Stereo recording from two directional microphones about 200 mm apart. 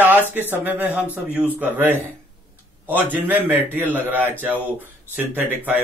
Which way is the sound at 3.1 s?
10° right (ahead or behind).